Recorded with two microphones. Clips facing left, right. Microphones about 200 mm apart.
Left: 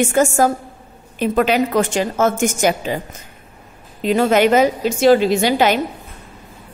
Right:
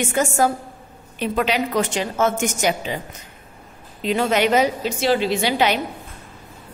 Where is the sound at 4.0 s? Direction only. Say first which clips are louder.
Left 5 dB; 45° left (ahead or behind).